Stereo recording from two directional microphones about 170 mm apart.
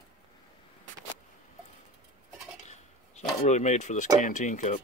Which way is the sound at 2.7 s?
40° left (ahead or behind).